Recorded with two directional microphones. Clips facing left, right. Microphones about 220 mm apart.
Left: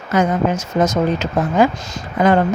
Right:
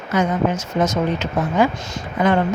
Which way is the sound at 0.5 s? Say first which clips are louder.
Left 3 dB; 20° left (ahead or behind).